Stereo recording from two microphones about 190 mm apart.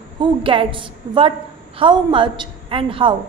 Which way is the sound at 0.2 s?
25° right (ahead or behind).